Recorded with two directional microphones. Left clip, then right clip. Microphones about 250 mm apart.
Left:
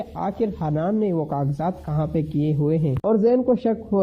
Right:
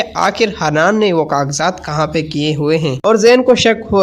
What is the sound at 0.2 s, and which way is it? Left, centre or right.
Speech, centre.